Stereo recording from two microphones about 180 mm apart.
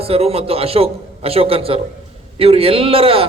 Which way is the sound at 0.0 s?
35° right (ahead or behind).